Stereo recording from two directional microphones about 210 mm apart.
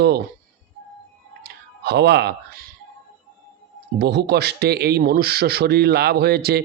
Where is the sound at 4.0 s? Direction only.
50° right (ahead or behind).